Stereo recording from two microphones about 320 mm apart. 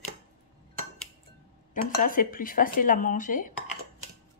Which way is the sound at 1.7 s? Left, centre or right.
Left.